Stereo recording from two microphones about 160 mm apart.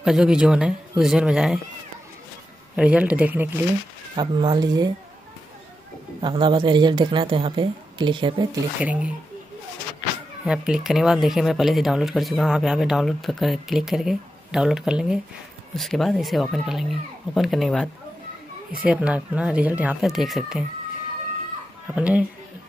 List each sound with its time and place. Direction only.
0.0 s speech: 5° right (ahead or behind)
2.7 s speech: 10° right (ahead or behind)
4.2 s speech: 25° right (ahead or behind)
6.2 s speech: 30° right (ahead or behind)
8.7 s speech: 10° right (ahead or behind)
10.4 s speech: 5° right (ahead or behind)
18.9 s speech: 10° right (ahead or behind)
21.9 s speech: 10° right (ahead or behind)